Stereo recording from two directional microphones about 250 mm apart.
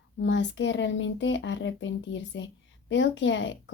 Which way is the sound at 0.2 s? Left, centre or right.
Left.